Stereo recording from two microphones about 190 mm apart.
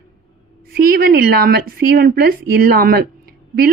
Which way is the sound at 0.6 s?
55° right (ahead or behind).